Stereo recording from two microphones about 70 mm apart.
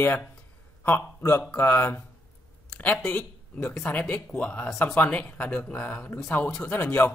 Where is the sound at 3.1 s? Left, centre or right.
Left.